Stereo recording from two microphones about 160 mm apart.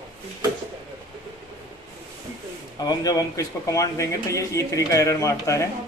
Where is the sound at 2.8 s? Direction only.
25° left (ahead or behind).